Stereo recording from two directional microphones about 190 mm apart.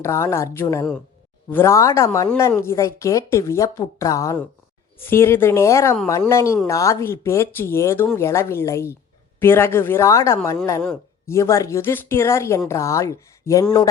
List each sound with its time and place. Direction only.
0.0 s speech: 15° left (ahead or behind)